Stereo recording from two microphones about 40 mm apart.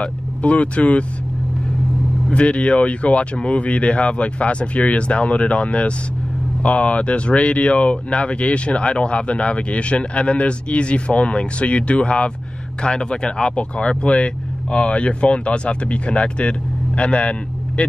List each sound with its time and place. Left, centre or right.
0.0 s speech: left
2.3 s speech: left